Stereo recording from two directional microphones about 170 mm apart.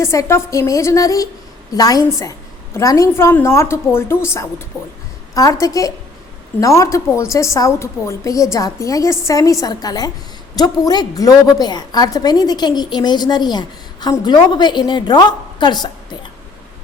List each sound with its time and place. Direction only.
0.0 s a woman's voice: 15° left (ahead or behind)
5.3 s a woman's voice: 20° left (ahead or behind)